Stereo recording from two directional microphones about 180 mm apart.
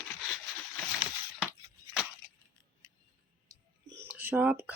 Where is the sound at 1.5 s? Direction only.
5° right (ahead or behind).